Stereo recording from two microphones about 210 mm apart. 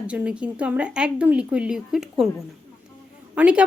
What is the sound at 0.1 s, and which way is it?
A woman's voice, 5° right (ahead or behind).